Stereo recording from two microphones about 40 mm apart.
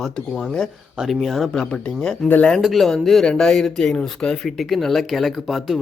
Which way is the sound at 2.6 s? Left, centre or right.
Centre.